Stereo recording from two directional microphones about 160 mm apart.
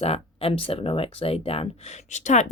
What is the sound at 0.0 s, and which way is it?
Speech, 35° left (ahead or behind).